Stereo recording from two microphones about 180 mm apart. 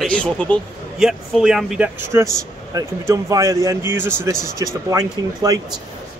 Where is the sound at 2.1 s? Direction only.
15° right (ahead or behind).